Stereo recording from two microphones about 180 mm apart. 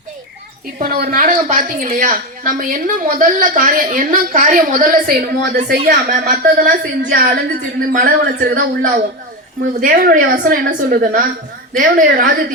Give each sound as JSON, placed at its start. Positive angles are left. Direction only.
{"t": 0.8, "sound": "a woman's voice", "side_deg": -55}